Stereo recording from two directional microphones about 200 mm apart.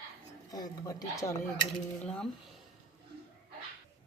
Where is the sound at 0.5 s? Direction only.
20° left (ahead or behind).